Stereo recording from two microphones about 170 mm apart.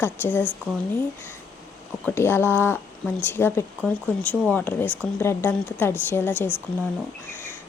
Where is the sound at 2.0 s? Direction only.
15° left (ahead or behind).